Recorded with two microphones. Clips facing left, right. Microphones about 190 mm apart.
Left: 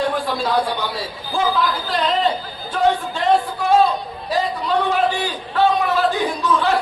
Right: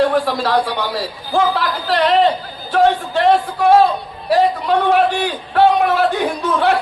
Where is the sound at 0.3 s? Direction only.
80° right.